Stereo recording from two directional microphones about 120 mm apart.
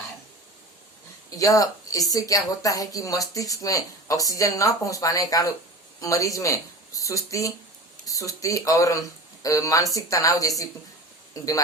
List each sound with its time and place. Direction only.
1.4 s speech: 30° left (ahead or behind)